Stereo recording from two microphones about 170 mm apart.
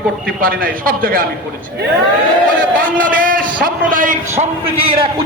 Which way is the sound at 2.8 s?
55° right (ahead or behind).